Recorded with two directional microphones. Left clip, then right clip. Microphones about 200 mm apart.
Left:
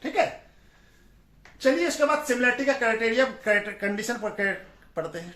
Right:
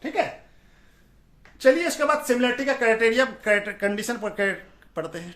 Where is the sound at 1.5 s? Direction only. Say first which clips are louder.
Right 4 dB; 55° right (ahead or behind).